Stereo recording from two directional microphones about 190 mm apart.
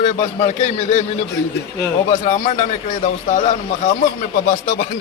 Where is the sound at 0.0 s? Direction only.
35° left (ahead or behind).